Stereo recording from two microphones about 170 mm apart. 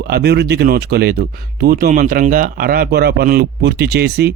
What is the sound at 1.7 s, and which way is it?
Speech, 50° right (ahead or behind).